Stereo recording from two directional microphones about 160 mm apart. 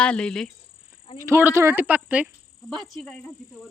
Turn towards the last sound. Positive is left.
turn(degrees=5)  # may be behind; listen again after turning